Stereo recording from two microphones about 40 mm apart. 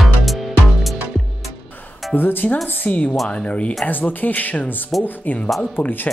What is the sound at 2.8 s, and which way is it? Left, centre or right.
Speech, left.